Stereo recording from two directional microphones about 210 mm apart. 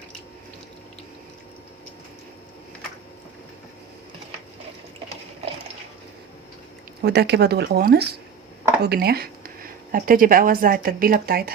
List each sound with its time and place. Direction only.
7.0 s speech: 50° right (ahead or behind)